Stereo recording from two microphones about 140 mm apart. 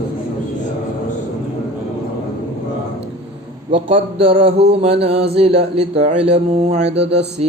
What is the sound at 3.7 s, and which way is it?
Mantra, 40° right (ahead or behind).